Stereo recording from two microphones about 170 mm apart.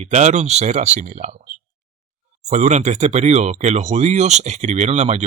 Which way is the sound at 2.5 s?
45° right (ahead or behind).